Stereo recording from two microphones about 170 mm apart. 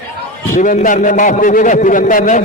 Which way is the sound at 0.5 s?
50° left (ahead or behind).